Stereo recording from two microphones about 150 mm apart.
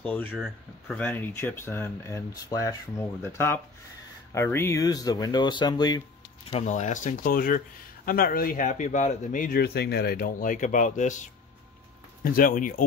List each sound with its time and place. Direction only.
0.0 s speech: 10° left (ahead or behind)
0.3 s speech: 5° right (ahead or behind)
0.9 s speech: 10° left (ahead or behind)
6.6 s speech: 55° left (ahead or behind)
12.2 s speech: 70° left (ahead or behind)